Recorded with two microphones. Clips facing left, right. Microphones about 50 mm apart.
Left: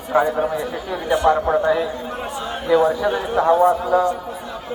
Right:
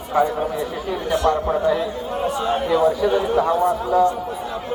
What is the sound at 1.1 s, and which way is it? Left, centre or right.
Speech, left.